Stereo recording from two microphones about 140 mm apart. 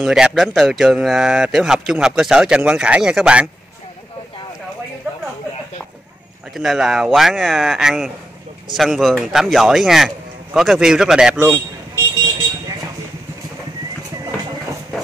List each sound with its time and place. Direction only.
0.0 s speech: 5° right (ahead or behind)
6.5 s speech: centre (ahead or behind)
11.3 s vehicle: 15° right (ahead or behind)